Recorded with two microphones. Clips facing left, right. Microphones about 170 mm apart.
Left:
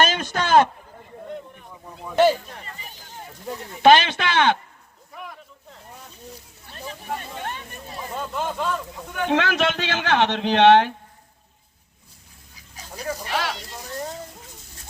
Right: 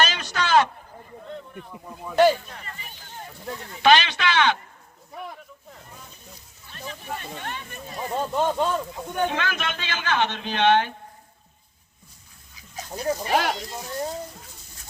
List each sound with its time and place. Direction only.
0.0 s a sound: 50° left (ahead or behind)
1.7 s speech: centre (ahead or behind)
3.4 s speech: 10° left (ahead or behind)
3.8 s speech: 50° left (ahead or behind)
7.9 s speech: 35° right (ahead or behind)
9.3 s speech: 80° left
12.9 s speech: 30° right (ahead or behind)
13.2 s speech: 50° right (ahead or behind)